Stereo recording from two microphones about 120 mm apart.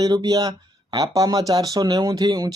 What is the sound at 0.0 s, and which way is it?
Speech, 35° right (ahead or behind).